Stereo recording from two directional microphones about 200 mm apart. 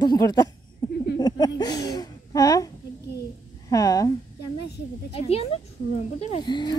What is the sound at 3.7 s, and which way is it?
Speech, 15° left (ahead or behind).